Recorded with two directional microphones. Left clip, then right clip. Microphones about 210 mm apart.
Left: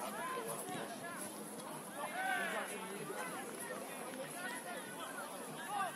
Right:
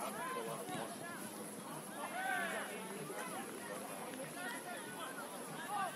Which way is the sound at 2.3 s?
35° left (ahead or behind).